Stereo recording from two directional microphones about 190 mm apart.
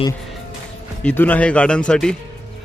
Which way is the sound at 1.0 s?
10° left (ahead or behind).